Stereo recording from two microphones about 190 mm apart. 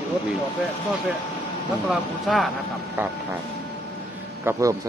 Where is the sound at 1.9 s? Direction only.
Centre (ahead or behind).